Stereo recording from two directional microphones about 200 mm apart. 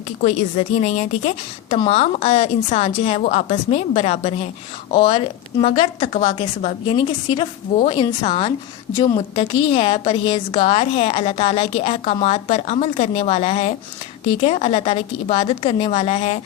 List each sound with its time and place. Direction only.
0.2 s a woman's voice: 35° left (ahead or behind)